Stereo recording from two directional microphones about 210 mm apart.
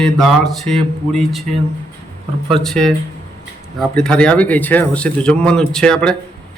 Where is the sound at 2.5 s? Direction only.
Centre (ahead or behind).